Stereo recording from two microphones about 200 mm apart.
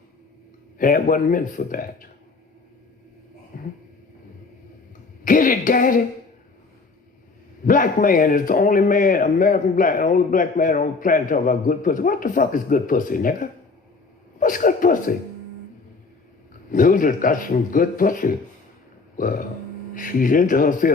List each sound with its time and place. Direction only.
0.8 s a man's voice: 45° left (ahead or behind)
3.5 s a sound: 45° left (ahead or behind)
5.2 s speech: 45° left (ahead or behind)
7.6 s a man's voice: 40° left (ahead or behind)
16.7 s a man's voice: 40° left (ahead or behind)